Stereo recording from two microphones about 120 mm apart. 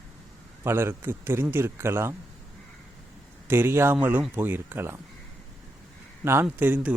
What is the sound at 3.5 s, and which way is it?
Speech, 20° right (ahead or behind).